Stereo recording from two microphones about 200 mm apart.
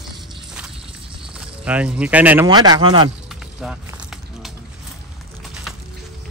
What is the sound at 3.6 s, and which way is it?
Speech, 5° right (ahead or behind).